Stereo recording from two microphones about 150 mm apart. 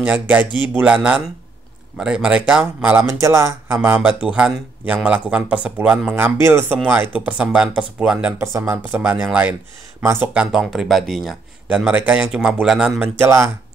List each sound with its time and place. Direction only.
0.0 s speech: 10° right (ahead or behind)
13.2 s speech: 15° right (ahead or behind)